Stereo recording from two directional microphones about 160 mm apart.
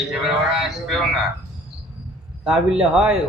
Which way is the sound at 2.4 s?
5° right (ahead or behind).